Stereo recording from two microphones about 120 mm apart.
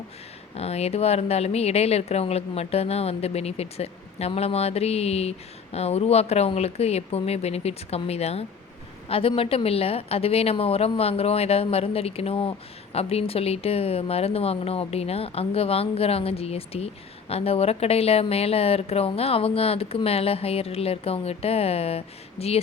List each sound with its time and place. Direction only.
0.5 s a woman's voice: 60° left (ahead or behind)